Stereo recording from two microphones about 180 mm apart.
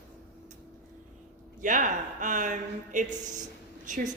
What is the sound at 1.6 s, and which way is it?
Speech, 45° right (ahead or behind).